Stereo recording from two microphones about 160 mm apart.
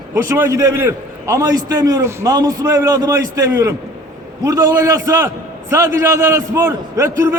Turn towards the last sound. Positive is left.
turn(degrees=-15)  # may be behind; listen again after turning